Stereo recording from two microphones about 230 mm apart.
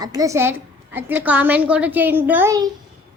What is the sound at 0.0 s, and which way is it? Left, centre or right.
A woman's voice, centre.